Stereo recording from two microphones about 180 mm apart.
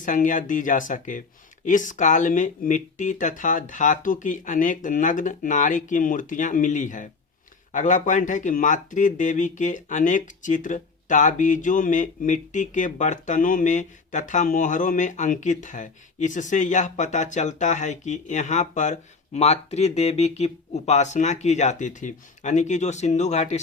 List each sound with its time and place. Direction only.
0.0 s speech: 45° left (ahead or behind)